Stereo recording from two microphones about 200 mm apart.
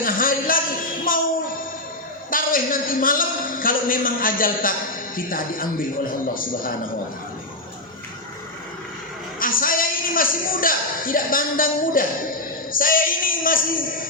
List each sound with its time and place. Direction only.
0.0 s a sound: 45° left (ahead or behind)
2.3 s a man's voice: 45° left (ahead or behind)
9.4 s a man's voice: 45° left (ahead or behind)